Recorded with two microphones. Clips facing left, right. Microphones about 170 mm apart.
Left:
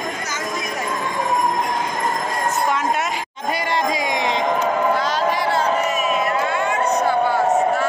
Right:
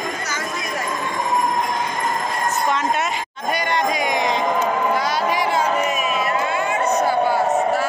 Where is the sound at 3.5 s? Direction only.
25° left (ahead or behind).